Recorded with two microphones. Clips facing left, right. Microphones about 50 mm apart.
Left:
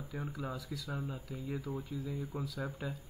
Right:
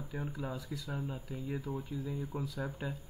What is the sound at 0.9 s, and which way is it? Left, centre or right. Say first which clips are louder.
Speech: right 2 dB; right.